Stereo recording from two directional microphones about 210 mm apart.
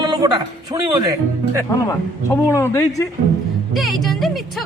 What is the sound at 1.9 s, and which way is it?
Speech, 15° left (ahead or behind).